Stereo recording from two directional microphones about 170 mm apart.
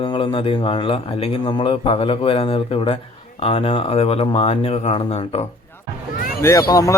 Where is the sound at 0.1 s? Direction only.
30° left (ahead or behind).